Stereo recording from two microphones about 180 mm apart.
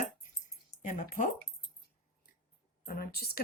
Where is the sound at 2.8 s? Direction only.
55° left (ahead or behind).